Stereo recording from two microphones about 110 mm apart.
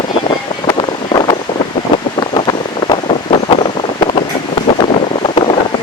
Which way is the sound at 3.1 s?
55° left (ahead or behind).